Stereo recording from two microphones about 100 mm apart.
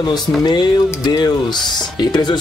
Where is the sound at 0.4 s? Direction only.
45° left (ahead or behind).